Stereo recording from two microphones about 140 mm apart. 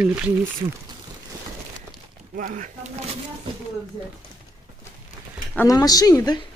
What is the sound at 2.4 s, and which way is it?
Speech, 65° right (ahead or behind).